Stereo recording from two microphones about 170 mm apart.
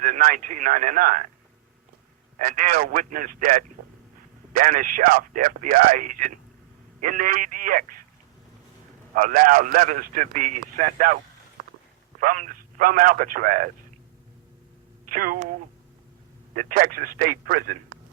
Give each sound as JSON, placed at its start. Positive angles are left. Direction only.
{"t": 0.0, "sound": "a man's voice", "side_deg": -55}
{"t": 2.4, "sound": "a man's voice", "side_deg": -55}
{"t": 9.1, "sound": "a man's voice", "side_deg": -55}
{"t": 12.2, "sound": "a man's voice", "side_deg": -50}
{"t": 15.1, "sound": "speech", "side_deg": -55}
{"t": 16.6, "sound": "speech", "side_deg": -55}